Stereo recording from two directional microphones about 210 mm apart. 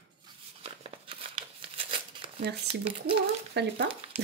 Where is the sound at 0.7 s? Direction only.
25° right (ahead or behind).